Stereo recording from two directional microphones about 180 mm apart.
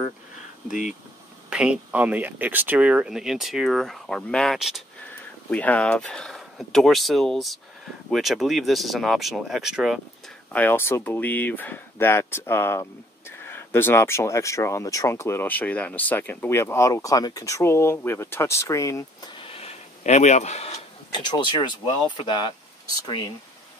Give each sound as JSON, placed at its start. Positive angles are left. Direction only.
{"t": 0.7, "sound": "speech", "side_deg": 45}
{"t": 1.5, "sound": "speech", "side_deg": -5}
{"t": 10.5, "sound": "speech", "side_deg": 10}
{"t": 21.2, "sound": "speech", "side_deg": 25}